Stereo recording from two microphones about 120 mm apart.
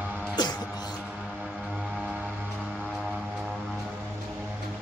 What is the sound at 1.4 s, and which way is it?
Music, 10° right (ahead or behind).